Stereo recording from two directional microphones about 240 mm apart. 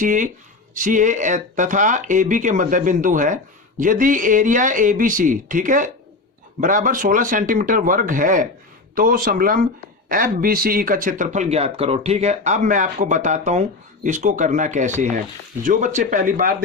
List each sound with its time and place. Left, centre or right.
0.0 s speech: right